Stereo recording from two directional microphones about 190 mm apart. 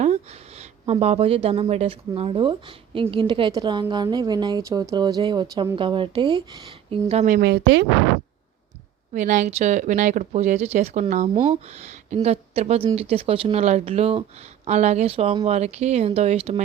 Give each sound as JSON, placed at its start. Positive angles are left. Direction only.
{"t": 0.0, "sound": "speech", "side_deg": -35}
{"t": 7.3, "sound": "speech", "side_deg": -60}
{"t": 9.1, "sound": "speech", "side_deg": -40}